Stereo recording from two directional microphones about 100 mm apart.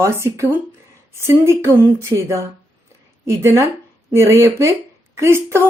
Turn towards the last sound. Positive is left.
turn(degrees=-25)  # may be behind; listen again after turning